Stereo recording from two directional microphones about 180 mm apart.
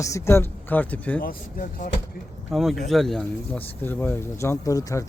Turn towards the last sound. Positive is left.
turn(degrees=20)  # may be behind; listen again after turning